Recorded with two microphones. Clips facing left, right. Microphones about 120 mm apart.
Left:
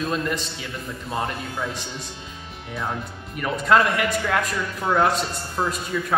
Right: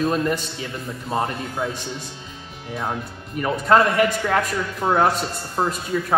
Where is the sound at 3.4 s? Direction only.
35° right (ahead or behind).